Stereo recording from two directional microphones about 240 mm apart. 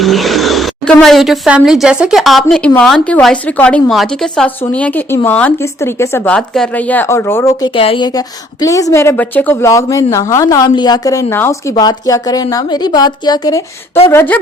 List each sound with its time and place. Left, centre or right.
0.0 s a woman's voice: centre; by 14.1 s left
14.1 s a woman's voice: centre